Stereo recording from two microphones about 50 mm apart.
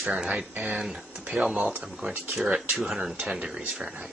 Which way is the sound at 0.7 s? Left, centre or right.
Centre.